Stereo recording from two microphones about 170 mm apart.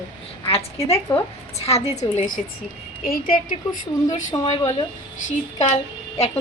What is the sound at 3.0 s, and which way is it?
A woman's voice, 55° left (ahead or behind).